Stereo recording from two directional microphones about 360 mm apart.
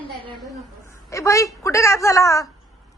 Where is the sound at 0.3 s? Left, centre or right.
Centre.